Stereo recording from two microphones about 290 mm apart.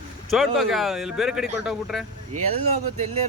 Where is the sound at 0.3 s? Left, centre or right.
Centre.